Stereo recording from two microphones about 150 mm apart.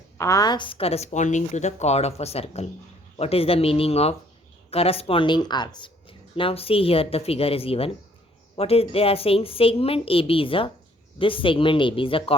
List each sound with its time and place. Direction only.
0.2 s a woman's voice: 25° left (ahead or behind)